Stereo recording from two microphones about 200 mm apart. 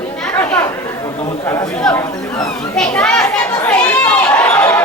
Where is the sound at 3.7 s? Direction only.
10° left (ahead or behind).